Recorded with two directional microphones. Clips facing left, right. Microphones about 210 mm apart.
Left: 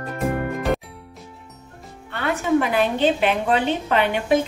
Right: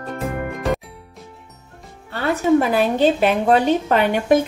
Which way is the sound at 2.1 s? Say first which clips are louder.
Right 4 dB; 35° right (ahead or behind).